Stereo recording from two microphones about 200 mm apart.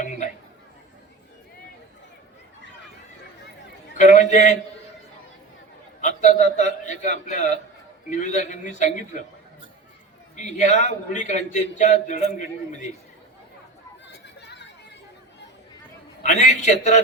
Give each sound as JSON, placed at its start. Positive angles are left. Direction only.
{"t": 3.9, "sound": "a man's voice", "side_deg": 35}
{"t": 6.0, "sound": "a man's voice", "side_deg": 35}
{"t": 10.3, "sound": "a man's voice", "side_deg": 35}
{"t": 14.1, "sound": "chatter", "side_deg": 60}
{"t": 16.2, "sound": "a man's voice", "side_deg": 35}